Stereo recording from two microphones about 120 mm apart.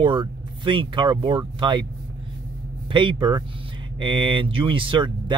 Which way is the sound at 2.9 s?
40° right (ahead or behind).